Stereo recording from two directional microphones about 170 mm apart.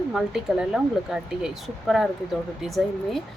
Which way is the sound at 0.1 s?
Centre (ahead or behind).